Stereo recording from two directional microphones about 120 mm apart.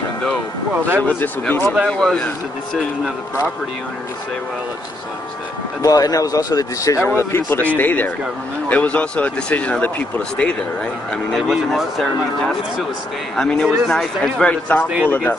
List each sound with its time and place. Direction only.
1.0 s speech: 15° left (ahead or behind)
5.8 s speech: 30° left (ahead or behind)
7.1 s speech: 20° left (ahead or behind)
11.3 s speech: centre (ahead or behind); by 15.3 s 15° left (ahead or behind)